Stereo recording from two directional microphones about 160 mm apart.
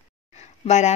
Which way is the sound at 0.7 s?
45° left (ahead or behind).